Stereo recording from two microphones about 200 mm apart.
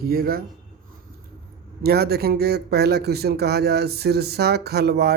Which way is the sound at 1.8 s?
50° right (ahead or behind).